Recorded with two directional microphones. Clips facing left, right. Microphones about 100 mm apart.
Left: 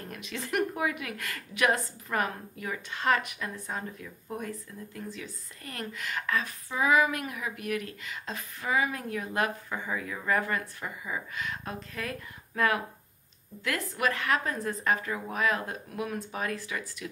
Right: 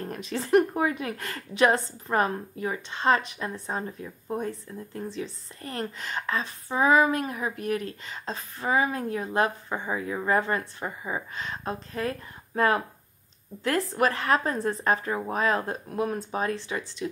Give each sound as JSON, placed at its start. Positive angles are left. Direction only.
{"t": 0.0, "sound": "a woman's voice", "side_deg": -35}